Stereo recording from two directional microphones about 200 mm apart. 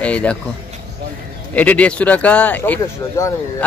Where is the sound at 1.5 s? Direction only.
5° left (ahead or behind).